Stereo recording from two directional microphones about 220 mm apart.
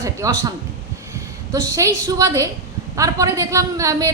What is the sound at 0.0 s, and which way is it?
Speech, 15° right (ahead or behind).